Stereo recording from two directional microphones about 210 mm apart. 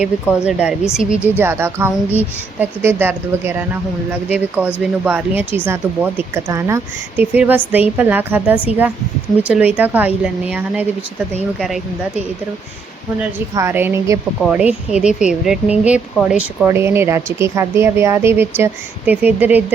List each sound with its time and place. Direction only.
0.3 s speech: 5° right (ahead or behind)
13.6 s speech: 10° right (ahead or behind)